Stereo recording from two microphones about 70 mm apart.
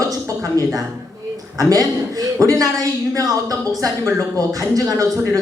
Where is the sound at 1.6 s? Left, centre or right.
Right.